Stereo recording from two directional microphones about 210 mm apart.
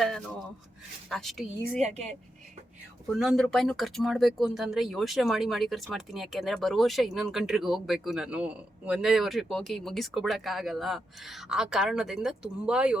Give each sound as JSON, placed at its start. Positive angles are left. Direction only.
{"t": 1.1, "sound": "speech", "side_deg": 0}
{"t": 1.8, "sound": "speech", "side_deg": -30}
{"t": 3.1, "sound": "speech", "side_deg": 0}